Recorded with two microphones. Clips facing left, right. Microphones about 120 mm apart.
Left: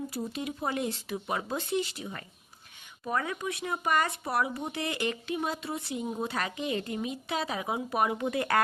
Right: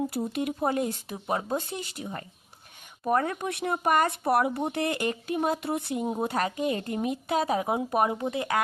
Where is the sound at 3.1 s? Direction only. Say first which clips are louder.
Right 6 dB; 45° right (ahead or behind).